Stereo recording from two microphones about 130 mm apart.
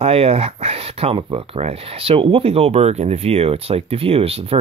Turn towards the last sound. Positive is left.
turn(degrees=-50)  # may be behind; listen again after turning